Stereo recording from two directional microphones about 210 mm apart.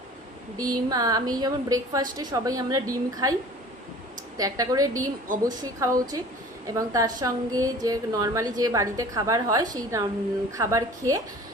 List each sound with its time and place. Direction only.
0.5 s a woman's voice: 15° right (ahead or behind)
4.4 s a woman's voice: 15° right (ahead or behind)